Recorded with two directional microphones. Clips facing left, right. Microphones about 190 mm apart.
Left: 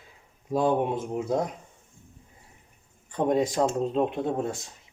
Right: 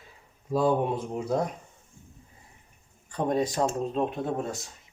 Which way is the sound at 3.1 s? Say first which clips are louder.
Left 3 dB; 20° left (ahead or behind).